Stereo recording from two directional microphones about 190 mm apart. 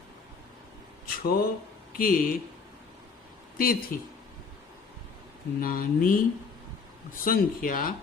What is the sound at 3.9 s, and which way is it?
Speech, 50° left (ahead or behind).